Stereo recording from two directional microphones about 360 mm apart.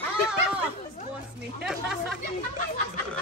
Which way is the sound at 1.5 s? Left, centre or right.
Centre.